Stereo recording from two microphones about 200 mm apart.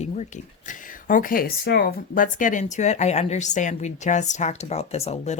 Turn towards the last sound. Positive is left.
turn(degrees=30)  # may be behind; listen again after turning